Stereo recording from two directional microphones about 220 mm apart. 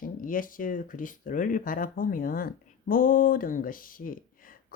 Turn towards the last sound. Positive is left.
turn(degrees=40)  # may be behind; listen again after turning